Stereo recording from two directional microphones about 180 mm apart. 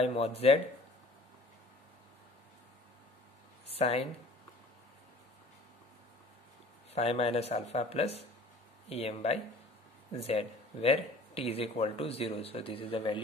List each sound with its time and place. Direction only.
0.0 s speech: 35° left (ahead or behind)
3.7 s speech: 35° left (ahead or behind)
6.9 s speech: 35° left (ahead or behind)